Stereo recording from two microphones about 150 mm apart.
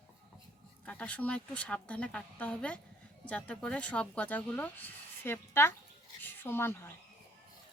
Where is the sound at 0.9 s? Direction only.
10° left (ahead or behind).